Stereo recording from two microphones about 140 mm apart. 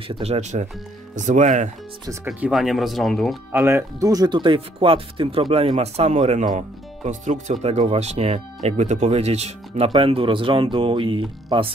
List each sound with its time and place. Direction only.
0.1 s speech: 45° right (ahead or behind)
2.2 s speech: 5° right (ahead or behind)
3.5 s speech: 20° right (ahead or behind); by 7.5 s 60° right (ahead or behind)
7.6 s speech: 50° right (ahead or behind)